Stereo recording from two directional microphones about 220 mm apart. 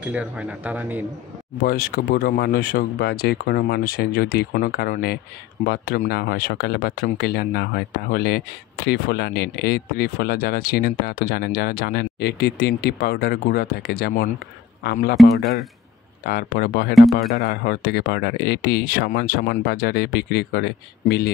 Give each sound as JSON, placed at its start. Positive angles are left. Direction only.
{"t": 0.0, "sound": "speech", "side_deg": -5}
{"t": 1.6, "sound": "speech", "side_deg": 40}
{"t": 16.3, "sound": "speech", "side_deg": 45}